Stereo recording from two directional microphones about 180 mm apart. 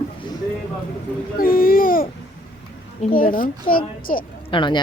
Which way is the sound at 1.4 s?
55° left (ahead or behind).